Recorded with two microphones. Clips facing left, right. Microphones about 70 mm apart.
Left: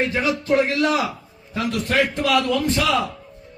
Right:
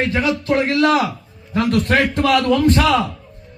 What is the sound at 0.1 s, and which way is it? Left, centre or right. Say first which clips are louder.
A man's voice: right 2 dB; right.